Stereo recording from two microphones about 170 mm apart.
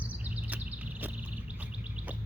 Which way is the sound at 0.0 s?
10° right (ahead or behind).